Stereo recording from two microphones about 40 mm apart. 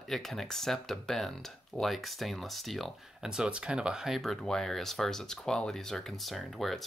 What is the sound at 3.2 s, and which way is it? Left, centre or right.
Speech, centre.